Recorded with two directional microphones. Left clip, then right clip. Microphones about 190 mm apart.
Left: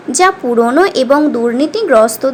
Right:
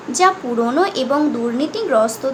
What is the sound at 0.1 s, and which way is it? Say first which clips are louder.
Speech: left 5 dB; 35° left (ahead or behind).